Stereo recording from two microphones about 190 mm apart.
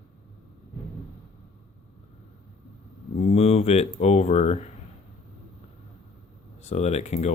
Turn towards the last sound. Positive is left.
turn(degrees=35)  # may be behind; listen again after turning